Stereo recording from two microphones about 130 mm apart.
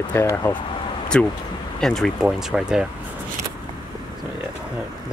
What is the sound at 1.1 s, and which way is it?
Speech, 10° left (ahead or behind).